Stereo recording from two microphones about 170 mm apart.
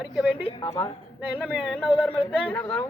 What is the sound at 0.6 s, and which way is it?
Speech, 20° left (ahead or behind).